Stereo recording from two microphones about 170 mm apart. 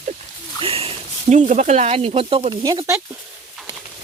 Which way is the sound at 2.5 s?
25° right (ahead or behind).